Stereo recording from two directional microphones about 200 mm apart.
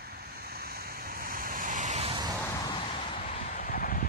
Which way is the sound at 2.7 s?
25° left (ahead or behind).